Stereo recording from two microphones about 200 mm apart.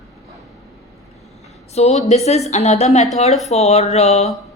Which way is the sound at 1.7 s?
35° left (ahead or behind).